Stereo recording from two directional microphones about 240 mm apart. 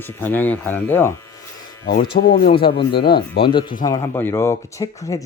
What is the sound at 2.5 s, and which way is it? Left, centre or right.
Speech, left.